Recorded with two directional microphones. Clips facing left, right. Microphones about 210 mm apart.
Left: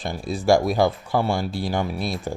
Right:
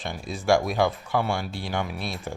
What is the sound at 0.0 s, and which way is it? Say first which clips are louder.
Speech: left 5 dB; 35° left (ahead or behind).